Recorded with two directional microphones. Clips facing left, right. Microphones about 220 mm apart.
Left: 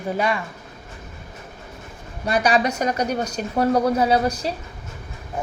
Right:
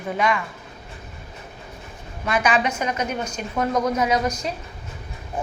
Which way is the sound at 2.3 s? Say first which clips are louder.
Left 2 dB; 35° left (ahead or behind).